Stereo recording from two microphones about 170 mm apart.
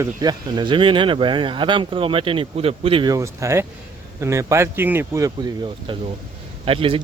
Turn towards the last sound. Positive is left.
turn(degrees=-30)  # may be behind; listen again after turning